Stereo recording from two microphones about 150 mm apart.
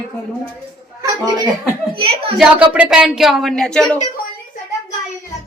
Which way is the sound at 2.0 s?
40° right (ahead or behind).